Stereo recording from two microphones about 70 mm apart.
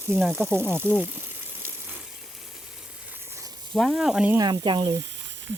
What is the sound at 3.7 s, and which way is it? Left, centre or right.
Speech, centre.